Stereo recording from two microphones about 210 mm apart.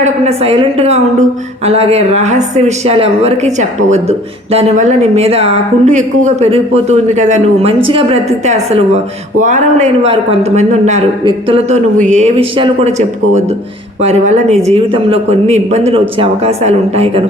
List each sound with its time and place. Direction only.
0.0 s a man's voice: 30° right (ahead or behind)